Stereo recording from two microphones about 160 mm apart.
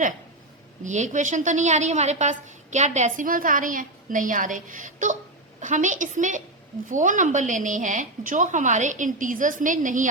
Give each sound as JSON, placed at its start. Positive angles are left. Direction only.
{"t": 0.9, "sound": "a woman's voice", "side_deg": -50}